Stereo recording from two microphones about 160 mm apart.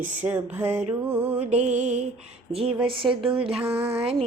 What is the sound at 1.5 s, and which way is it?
A woman's voice, 45° right (ahead or behind).